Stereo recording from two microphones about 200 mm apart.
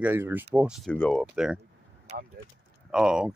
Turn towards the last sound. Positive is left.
turn(degrees=0)  # may be behind; listen again after turning